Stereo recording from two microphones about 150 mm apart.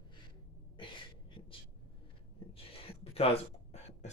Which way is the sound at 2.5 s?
40° left (ahead or behind).